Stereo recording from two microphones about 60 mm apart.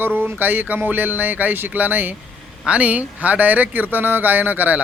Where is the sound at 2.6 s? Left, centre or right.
Right.